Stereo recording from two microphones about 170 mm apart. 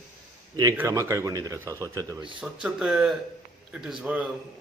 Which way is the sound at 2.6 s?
5° right (ahead or behind).